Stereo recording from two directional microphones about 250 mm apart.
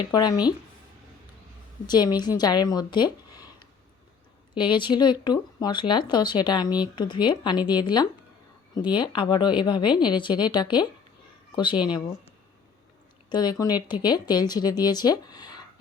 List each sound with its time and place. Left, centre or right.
0.0 s speech: centre
1.9 s speech: centre
4.5 s speech: centre
13.3 s speech: centre